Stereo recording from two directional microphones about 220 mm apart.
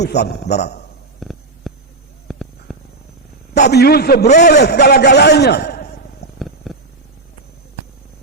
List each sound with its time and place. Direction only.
0.0 s a man's voice: 50° left (ahead or behind)
1.2 s a sound: centre (ahead or behind)
3.7 s a man's voice: 45° left (ahead or behind)
6.6 s purr: centre (ahead or behind)